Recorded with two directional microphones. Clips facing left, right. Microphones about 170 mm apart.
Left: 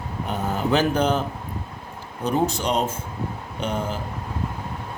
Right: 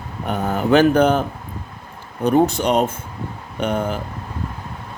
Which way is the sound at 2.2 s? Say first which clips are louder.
Right 6 dB; 60° right (ahead or behind).